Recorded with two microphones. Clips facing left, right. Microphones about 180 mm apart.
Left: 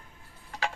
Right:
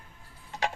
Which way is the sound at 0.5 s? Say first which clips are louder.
Right 2 dB; 20° right (ahead or behind).